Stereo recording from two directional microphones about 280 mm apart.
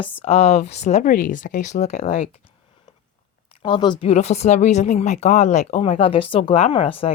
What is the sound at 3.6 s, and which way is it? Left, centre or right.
Speech, centre.